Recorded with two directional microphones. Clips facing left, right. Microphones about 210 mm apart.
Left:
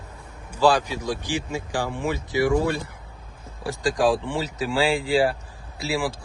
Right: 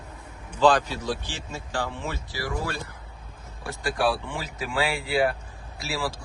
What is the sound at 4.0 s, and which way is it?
Speech, 20° left (ahead or behind).